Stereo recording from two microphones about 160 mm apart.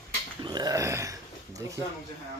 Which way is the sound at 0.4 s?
25° right (ahead or behind).